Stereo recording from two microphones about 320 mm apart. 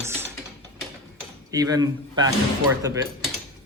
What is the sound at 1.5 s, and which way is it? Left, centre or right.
Speech, centre.